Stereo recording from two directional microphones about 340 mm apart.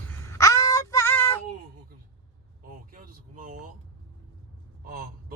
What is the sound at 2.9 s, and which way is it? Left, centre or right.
Vehicle, right.